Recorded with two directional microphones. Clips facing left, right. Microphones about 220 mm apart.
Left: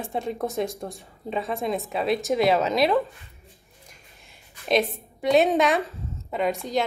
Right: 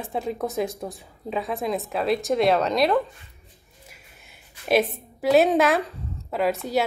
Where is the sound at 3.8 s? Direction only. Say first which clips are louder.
Right 2 dB; 5° right (ahead or behind).